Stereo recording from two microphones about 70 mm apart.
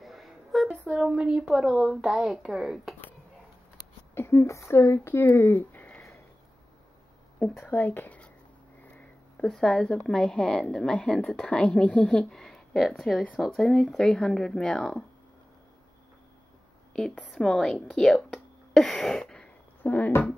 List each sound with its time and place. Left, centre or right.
0.0 s a sound: centre
1.0 s speech: centre
4.1 s speech: left
7.5 s speech: left
9.5 s a woman's voice: centre
17.3 s speech: centre
19.8 s speech: left